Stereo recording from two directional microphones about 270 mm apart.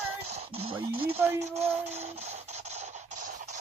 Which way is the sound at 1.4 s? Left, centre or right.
Right.